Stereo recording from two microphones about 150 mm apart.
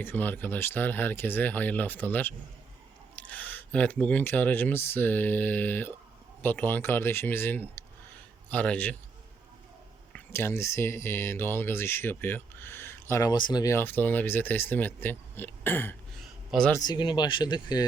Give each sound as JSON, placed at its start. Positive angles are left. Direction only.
{"t": 0.0, "sound": "speech", "side_deg": 10}
{"t": 10.1, "sound": "speech", "side_deg": 15}
{"t": 13.7, "sound": "speech", "side_deg": 10}
{"t": 16.5, "sound": "speech", "side_deg": 5}
{"t": 16.7, "sound": "speech", "side_deg": 25}